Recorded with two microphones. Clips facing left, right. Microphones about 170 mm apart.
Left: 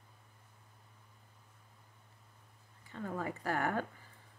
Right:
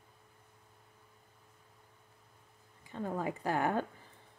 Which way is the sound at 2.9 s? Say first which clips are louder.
Right 3 dB; 20° right (ahead or behind).